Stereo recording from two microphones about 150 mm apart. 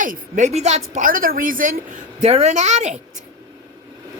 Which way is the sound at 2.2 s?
45° right (ahead or behind).